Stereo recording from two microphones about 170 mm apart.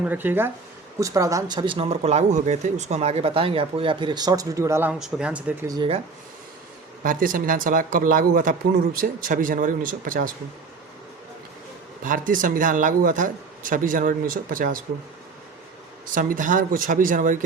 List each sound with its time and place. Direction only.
0.0 s speech: 10° right (ahead or behind)
5.6 s speech: 25° right (ahead or behind)
7.0 s speech: 55° right (ahead or behind)
12.0 s speech: 55° right (ahead or behind)
16.1 s speech: 50° right (ahead or behind)